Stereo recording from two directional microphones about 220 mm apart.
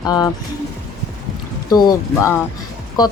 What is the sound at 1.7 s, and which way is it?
Speech, 15° left (ahead or behind).